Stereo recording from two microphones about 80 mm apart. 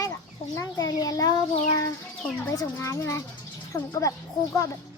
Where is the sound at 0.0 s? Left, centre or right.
Left.